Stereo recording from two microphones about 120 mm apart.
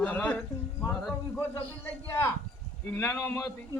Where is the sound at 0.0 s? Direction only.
10° left (ahead or behind).